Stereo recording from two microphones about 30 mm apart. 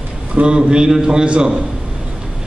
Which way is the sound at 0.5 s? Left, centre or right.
Right.